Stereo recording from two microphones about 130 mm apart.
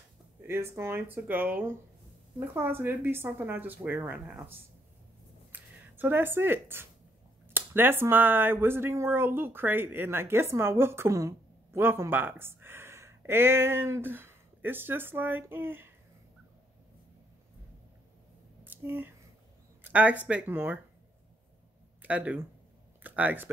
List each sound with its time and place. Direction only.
0.5 s speech: 20° right (ahead or behind)
18.6 s a sound: 15° right (ahead or behind)
19.8 s speech: 10° right (ahead or behind)
22.0 s speech: 10° right (ahead or behind)